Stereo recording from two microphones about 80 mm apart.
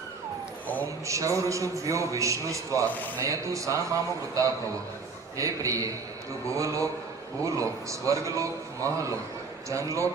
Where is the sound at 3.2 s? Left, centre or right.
Right.